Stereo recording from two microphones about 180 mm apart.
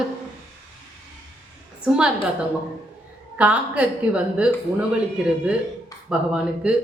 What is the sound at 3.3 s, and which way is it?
A woman's voice, 5° right (ahead or behind).